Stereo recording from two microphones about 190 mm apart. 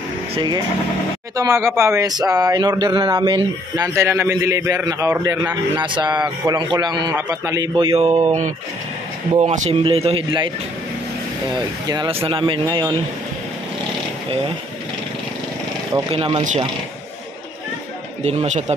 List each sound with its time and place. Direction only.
0.3 s a man's voice: 25° right (ahead or behind)
5.8 s a man's voice: 25° right (ahead or behind)
11.5 s a man's voice: 25° right (ahead or behind)
15.9 s a man's voice: 25° right (ahead or behind)
18.2 s speech: 35° right (ahead or behind)